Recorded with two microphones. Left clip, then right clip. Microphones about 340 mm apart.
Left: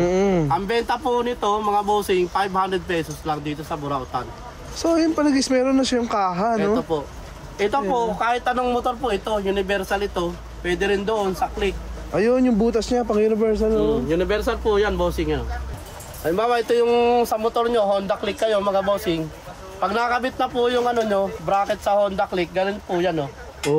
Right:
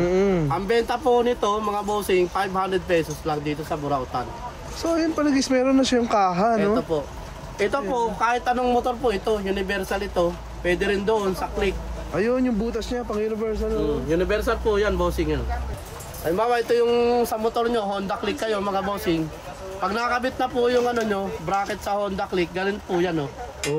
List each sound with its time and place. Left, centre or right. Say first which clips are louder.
0.0 s speech: left 2 dB; centre
4.8 s speech: left 3 dB; centre
6.6 s speech: left 1 dB; centre
16.3 s speech: left 1 dB; left